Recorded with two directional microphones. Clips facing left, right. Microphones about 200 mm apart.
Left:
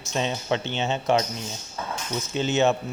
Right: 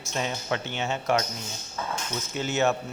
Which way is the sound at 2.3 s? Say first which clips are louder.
Left 3 dB; 25° left (ahead or behind).